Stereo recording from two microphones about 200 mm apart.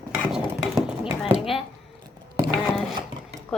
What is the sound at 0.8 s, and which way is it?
Clip-clop, 5° right (ahead or behind).